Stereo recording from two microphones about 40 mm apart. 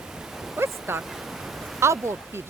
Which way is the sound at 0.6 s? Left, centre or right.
Right.